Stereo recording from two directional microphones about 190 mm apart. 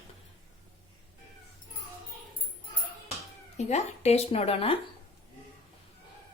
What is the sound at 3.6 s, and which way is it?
Speech, 35° left (ahead or behind).